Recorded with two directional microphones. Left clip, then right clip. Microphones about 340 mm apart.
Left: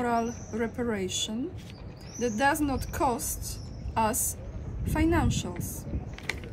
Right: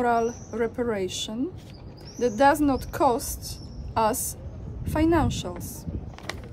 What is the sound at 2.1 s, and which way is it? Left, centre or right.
A woman's voice, centre.